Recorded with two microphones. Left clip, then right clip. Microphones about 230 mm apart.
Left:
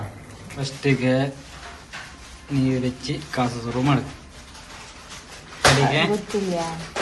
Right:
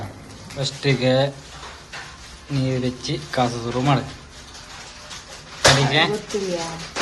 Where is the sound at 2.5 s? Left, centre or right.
Centre.